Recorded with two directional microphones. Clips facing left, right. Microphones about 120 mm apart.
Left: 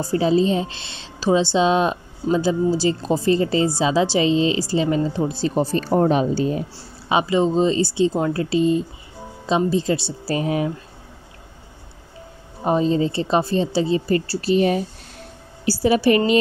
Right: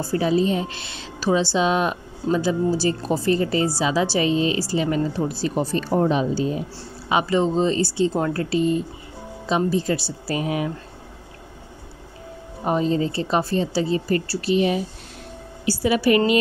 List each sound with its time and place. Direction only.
0.1 s a woman's voice: 25° left (ahead or behind); by 6.4 s 50° left (ahead or behind)
7.1 s a woman's voice: 20° left (ahead or behind)
12.6 s a woman's voice: 25° left (ahead or behind)
14.5 s speech: 40° left (ahead or behind)